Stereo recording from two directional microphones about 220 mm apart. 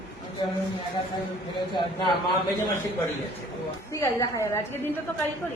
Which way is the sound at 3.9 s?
15° left (ahead or behind).